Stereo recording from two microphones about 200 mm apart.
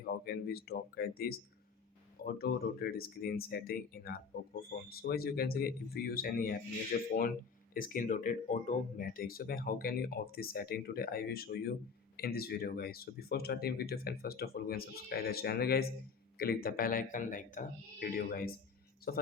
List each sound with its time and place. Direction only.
0.3 s speech: 50° left (ahead or behind)